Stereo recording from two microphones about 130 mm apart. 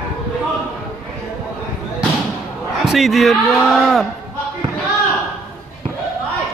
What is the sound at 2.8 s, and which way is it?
A man's voice, centre (ahead or behind).